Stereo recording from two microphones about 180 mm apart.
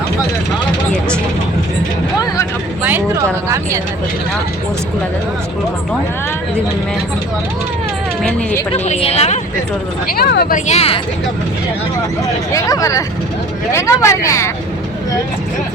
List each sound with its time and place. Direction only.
2.8 s speech: 10° right (ahead or behind)
8.7 s a woman's voice: 35° left (ahead or behind)
10.2 s speech: 60° left (ahead or behind)
10.7 s a woman's voice: 35° left (ahead or behind)
12.5 s speech: 20° left (ahead or behind)